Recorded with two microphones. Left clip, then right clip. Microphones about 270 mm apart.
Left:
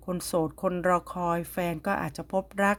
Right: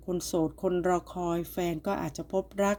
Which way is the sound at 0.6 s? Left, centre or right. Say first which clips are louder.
Left 3 dB; left.